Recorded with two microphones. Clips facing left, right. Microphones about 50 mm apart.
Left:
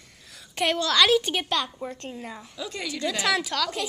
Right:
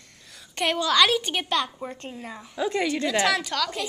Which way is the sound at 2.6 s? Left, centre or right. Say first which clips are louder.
Right 10 dB; right.